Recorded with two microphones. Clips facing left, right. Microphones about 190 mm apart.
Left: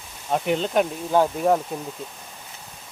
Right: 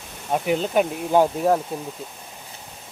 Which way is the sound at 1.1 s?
15° right (ahead or behind).